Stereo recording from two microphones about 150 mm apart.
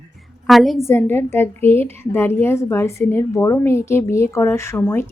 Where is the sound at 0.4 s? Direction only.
Centre (ahead or behind).